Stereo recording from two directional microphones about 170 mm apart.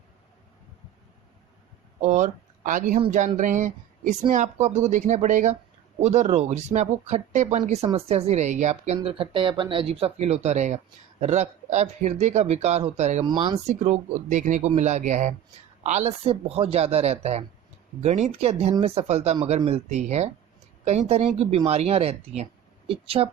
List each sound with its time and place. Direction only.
2.0 s speech: 45° right (ahead or behind)
9.0 s speech: 30° right (ahead or behind)
13.2 s speech: 25° right (ahead or behind)
13.7 s speech: 40° right (ahead or behind)